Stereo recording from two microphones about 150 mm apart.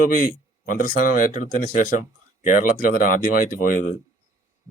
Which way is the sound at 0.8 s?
65° left (ahead or behind).